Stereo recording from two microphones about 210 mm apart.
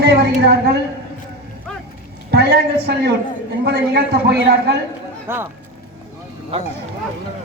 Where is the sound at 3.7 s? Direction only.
50° right (ahead or behind).